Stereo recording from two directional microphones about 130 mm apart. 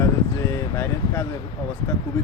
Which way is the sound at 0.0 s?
20° left (ahead or behind).